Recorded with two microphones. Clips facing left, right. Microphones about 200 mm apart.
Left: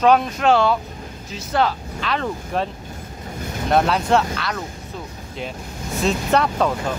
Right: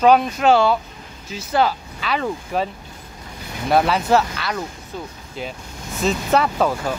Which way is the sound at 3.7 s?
5° right (ahead or behind).